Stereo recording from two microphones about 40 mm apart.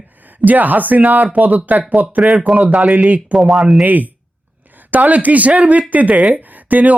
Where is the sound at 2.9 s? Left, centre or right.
Right.